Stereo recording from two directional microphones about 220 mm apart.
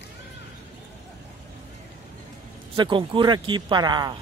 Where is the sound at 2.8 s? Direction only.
20° right (ahead or behind).